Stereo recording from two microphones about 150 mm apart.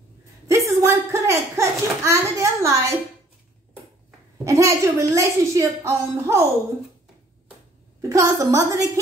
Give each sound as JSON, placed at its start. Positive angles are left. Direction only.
{"t": 0.7, "sound": "a sound", "side_deg": -20}
{"t": 4.5, "sound": "a woman's voice", "side_deg": -20}
{"t": 8.0, "sound": "a woman's voice", "side_deg": -20}